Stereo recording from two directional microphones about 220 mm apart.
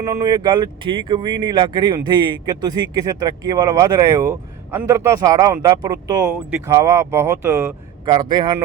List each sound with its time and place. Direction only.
0.0 s speech: 15° right (ahead or behind)